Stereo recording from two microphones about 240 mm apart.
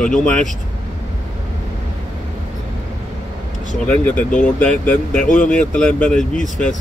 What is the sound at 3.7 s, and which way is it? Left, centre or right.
Speech, centre.